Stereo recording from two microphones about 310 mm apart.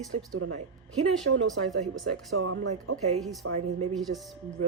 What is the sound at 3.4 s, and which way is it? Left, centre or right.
Speech, right.